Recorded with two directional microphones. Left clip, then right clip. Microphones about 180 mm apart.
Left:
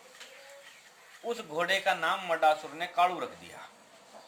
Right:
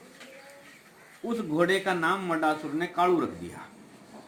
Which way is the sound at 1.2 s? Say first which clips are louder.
Right 5 dB; 20° left (ahead or behind).